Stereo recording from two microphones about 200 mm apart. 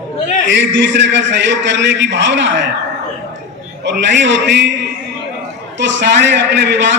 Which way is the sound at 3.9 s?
60° right (ahead or behind).